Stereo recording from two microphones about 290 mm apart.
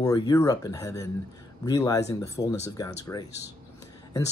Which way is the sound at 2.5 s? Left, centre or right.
Left.